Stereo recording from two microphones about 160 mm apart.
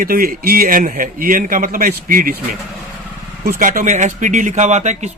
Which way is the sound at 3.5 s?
55° right (ahead or behind).